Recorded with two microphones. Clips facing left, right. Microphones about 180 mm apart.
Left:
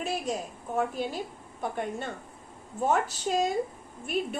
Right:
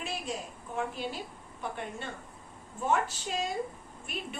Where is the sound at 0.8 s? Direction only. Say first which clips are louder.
Left 5 dB; 40° left (ahead or behind).